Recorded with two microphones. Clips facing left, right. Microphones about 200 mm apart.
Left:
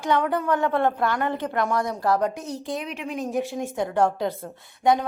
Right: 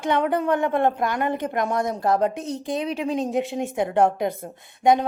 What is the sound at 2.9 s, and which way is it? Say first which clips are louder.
Speech: right 5 dB; 30° right (ahead or behind).